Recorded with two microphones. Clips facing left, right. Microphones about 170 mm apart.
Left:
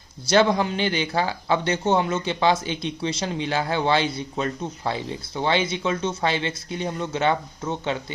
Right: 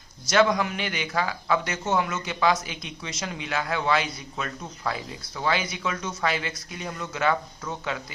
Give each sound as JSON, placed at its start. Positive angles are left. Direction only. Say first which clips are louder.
{"t": 0.3, "sound": "speech", "louder": "left 3 dB", "side_deg": 30}